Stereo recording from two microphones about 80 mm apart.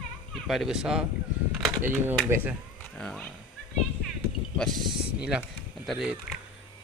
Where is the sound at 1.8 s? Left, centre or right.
Right.